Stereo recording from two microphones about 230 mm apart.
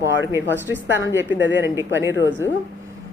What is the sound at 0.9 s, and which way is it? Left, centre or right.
A man's voice, centre.